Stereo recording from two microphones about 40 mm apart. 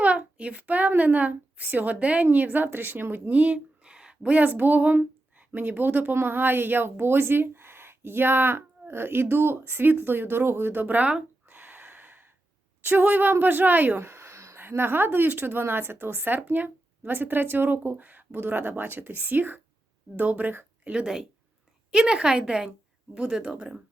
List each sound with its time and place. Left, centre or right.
0.0 s a child's voice: right
3.3 s speech: right
3.8 s a sound: right
4.4 s speech: right
10.8 s speech: right
11.4 s a sound: right
12.8 s speech: right
14.0 s speech: right
21.9 s a woman's voice: centre